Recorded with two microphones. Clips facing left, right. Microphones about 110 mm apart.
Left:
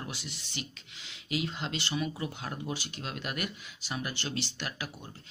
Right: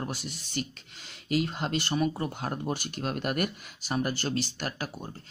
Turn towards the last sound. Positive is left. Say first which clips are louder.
# right 4 dB
turn(degrees=-40)  # may be behind; listen again after turning